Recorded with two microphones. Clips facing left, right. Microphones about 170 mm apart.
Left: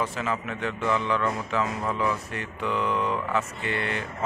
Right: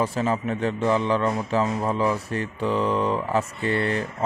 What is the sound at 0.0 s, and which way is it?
A man's voice, 35° right (ahead or behind).